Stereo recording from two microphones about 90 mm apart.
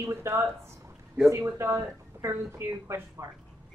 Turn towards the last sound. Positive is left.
turn(degrees=-30)  # may be behind; listen again after turning